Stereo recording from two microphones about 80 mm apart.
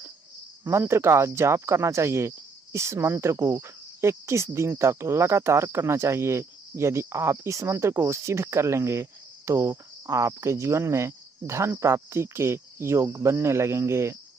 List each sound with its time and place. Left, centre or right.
0.7 s speech: right